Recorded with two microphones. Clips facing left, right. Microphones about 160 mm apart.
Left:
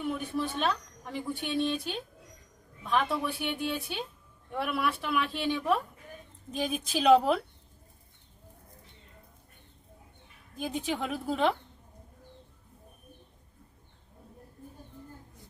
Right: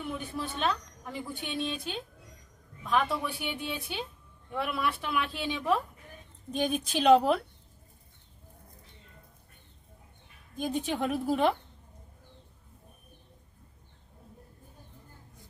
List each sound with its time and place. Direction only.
0.0 s a woman's voice: centre (ahead or behind)
6.5 s a woman's voice: 5° left (ahead or behind)
10.6 s a woman's voice: centre (ahead or behind)